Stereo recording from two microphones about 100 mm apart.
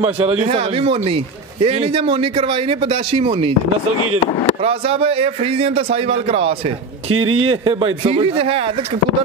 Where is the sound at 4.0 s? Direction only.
65° left (ahead or behind).